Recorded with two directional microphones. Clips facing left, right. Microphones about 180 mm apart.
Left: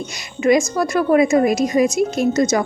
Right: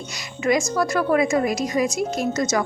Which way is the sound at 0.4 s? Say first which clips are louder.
Left 5 dB; 20° left (ahead or behind).